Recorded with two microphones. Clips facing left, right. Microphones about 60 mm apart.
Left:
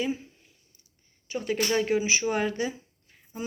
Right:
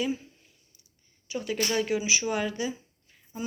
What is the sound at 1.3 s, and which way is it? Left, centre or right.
Speech, left.